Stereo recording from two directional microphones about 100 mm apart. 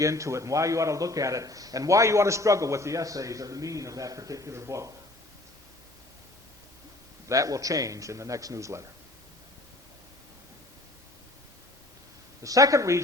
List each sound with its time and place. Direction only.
0.0 s speech: 30° right (ahead or behind)
7.3 s speech: 35° right (ahead or behind)
12.4 s speech: 35° right (ahead or behind)